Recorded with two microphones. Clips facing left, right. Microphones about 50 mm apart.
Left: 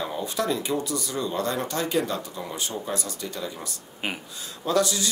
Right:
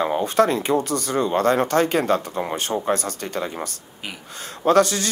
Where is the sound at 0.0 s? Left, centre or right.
Right.